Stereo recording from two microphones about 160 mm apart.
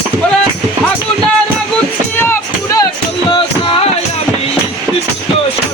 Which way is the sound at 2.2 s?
15° left (ahead or behind).